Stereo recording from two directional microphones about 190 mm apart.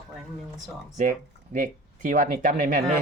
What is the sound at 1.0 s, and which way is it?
Speech, 45° right (ahead or behind).